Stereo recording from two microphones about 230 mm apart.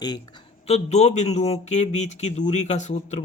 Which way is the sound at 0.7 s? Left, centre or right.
Left.